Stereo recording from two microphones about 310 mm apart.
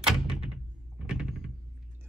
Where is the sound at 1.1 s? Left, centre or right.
Centre.